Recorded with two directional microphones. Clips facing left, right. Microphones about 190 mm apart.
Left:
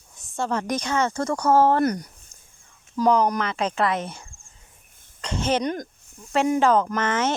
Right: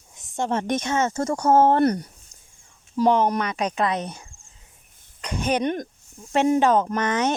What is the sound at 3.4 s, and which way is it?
Speech, 15° right (ahead or behind).